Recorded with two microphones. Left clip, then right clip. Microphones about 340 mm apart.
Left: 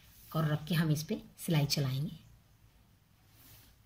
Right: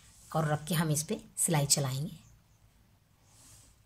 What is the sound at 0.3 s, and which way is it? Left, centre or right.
Speech, centre.